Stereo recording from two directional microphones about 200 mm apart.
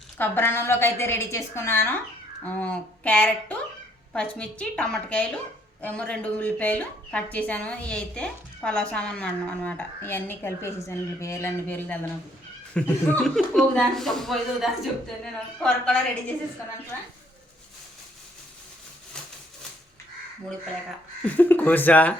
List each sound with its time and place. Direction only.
0.2 s a woman's voice: 10° left (ahead or behind)
21.2 s a woman's voice: 10° left (ahead or behind)